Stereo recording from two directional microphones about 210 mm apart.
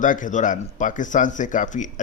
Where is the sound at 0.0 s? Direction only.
40° left (ahead or behind).